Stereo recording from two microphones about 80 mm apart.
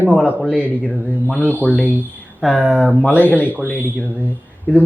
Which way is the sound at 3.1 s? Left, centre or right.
Left.